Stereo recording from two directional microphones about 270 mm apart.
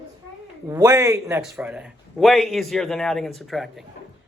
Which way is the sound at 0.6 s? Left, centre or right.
Centre.